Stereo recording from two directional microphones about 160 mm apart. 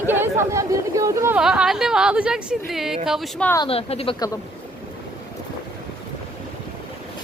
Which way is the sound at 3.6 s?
40° left (ahead or behind).